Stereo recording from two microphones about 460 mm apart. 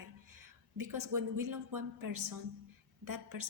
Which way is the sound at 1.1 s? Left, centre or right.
Right.